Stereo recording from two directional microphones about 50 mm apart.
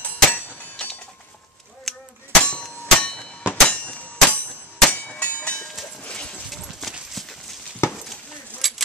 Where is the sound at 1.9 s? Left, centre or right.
Centre.